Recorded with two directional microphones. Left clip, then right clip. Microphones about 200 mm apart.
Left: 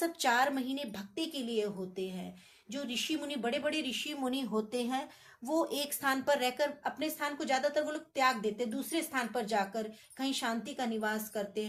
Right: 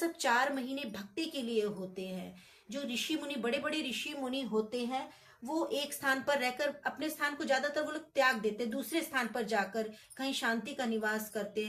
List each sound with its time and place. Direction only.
0.0 s speech: 35° left (ahead or behind)